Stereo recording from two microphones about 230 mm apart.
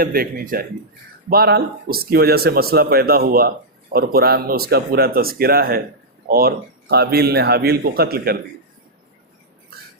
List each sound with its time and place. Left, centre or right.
0.0 s speech: right